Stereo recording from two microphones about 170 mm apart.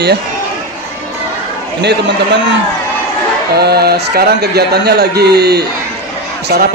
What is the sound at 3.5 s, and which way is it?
A man's voice, 70° right (ahead or behind).